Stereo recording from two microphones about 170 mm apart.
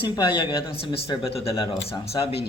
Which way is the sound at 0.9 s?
35° left (ahead or behind).